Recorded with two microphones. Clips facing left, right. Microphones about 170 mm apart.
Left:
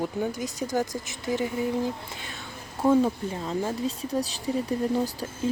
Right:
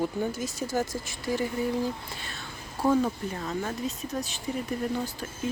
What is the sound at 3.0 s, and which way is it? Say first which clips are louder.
Speech: left 3 dB; 25° left (ahead or behind).